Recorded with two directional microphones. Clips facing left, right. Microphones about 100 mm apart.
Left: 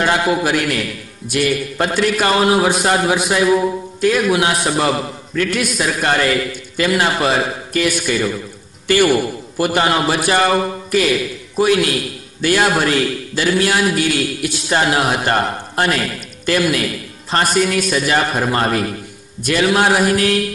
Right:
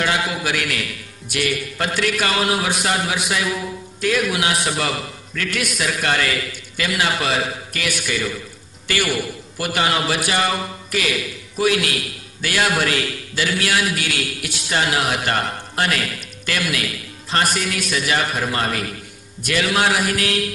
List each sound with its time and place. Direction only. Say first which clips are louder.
0.0 s a man's voice: left 6 dB; 40° left (ahead or behind)